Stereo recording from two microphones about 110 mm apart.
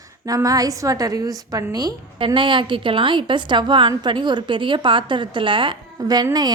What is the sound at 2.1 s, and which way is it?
A woman's voice, 50° right (ahead or behind).